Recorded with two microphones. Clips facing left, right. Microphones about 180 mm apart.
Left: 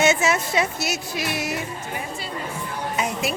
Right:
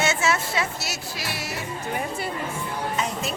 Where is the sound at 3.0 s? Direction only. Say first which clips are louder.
Left 6 dB; 10° left (ahead or behind).